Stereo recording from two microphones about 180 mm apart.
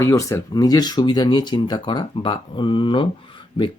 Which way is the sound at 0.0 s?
15° left (ahead or behind).